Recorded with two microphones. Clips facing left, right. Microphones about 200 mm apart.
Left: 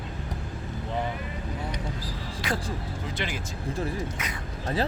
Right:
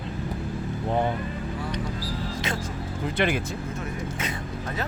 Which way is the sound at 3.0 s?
55° right (ahead or behind).